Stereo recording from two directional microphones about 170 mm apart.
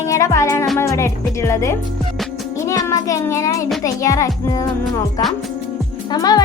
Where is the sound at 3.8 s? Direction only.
20° left (ahead or behind).